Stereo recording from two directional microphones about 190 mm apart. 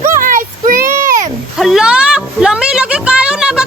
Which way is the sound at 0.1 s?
45° right (ahead or behind).